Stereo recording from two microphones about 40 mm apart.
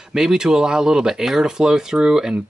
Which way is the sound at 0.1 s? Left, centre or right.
Centre.